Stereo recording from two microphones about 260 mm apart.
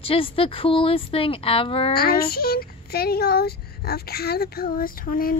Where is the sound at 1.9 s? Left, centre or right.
Left.